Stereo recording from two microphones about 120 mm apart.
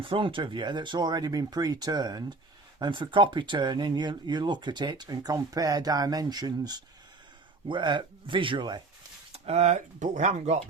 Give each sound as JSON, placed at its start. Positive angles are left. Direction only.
{"t": 0.0, "sound": "speech", "side_deg": -45}
{"t": 9.3, "sound": "speech", "side_deg": -65}